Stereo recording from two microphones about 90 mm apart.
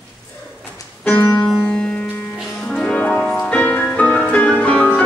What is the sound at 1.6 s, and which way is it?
Music, 15° left (ahead or behind).